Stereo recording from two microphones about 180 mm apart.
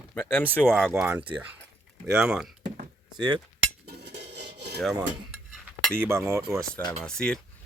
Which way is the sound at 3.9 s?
65° right (ahead or behind).